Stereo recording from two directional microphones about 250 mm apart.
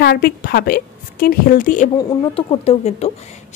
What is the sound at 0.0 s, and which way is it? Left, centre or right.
Speech, left.